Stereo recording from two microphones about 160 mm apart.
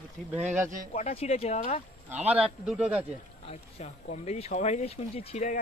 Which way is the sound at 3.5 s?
40° left (ahead or behind).